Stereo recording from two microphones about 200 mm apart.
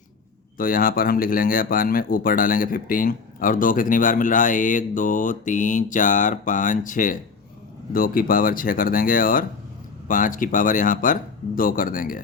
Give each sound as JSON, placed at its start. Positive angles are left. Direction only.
{"t": 0.5, "sound": "speech", "side_deg": 45}